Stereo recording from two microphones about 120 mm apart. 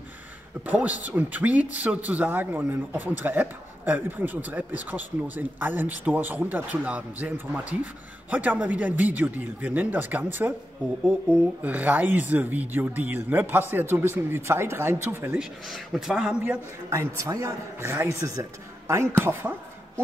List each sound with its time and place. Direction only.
0.7 s speech: 15° right (ahead or behind)
11.6 s speech: 15° right (ahead or behind)
15.7 s speech: 5° right (ahead or behind)
16.9 s speech: 25° right (ahead or behind)